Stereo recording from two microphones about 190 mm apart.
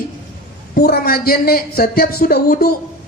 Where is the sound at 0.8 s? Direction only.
55° left (ahead or behind).